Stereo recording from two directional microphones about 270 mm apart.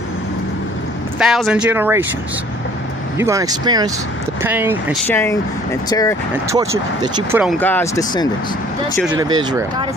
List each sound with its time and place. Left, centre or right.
1.2 s speech: centre
3.2 s speech: centre
5.0 s speech: centre
6.5 s speech: centre
7.6 s speech: centre
9.2 s speech: centre